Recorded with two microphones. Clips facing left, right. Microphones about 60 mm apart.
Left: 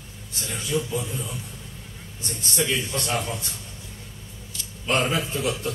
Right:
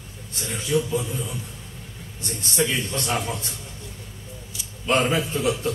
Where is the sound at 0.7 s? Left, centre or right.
Centre.